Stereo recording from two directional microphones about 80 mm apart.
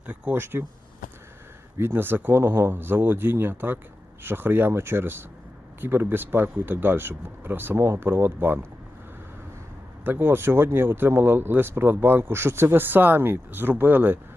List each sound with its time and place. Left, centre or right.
0.1 s speech: right
1.8 s speech: right
10.0 s speech: right